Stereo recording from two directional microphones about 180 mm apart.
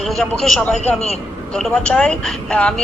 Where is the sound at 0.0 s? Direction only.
Centre (ahead or behind).